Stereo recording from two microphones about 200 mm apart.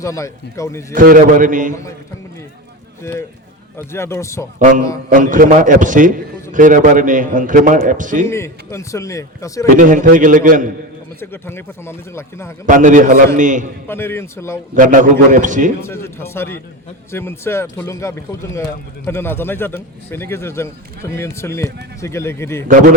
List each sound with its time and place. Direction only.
0.0 s a man's voice: 15° left (ahead or behind)
0.9 s a man's voice: 40° right (ahead or behind)
1.7 s a man's voice: 15° left (ahead or behind)
3.0 s a man's voice: 15° left (ahead or behind)
5.0 s a man's voice: 40° right (ahead or behind)
8.3 s a man's voice: 15° left (ahead or behind)
9.7 s a man's voice: 40° right (ahead or behind)
11.2 s a man's voice: 10° left (ahead or behind)
12.6 s a man's voice: 40° right (ahead or behind)
13.8 s a man's voice: 10° left (ahead or behind)
14.8 s a man's voice: 40° right (ahead or behind)
15.8 s a man's voice: 10° left (ahead or behind)